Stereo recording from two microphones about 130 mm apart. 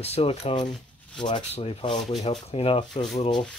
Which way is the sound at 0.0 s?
55° left (ahead or behind).